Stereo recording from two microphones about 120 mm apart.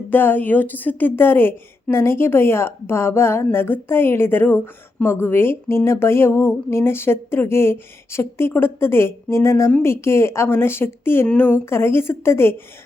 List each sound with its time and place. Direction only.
0.1 s a woman's voice: 15° left (ahead or behind)